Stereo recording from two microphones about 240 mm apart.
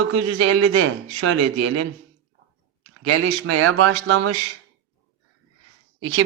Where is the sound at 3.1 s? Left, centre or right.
Right.